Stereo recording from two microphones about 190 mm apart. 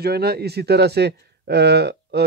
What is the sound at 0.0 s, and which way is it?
Speech, 55° right (ahead or behind).